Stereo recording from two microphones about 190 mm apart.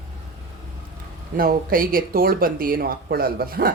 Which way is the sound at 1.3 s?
50° right (ahead or behind).